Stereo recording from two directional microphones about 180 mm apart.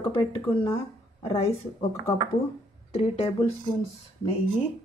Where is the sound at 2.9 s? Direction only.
35° left (ahead or behind).